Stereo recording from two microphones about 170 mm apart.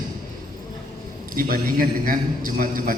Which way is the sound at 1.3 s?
55° right (ahead or behind).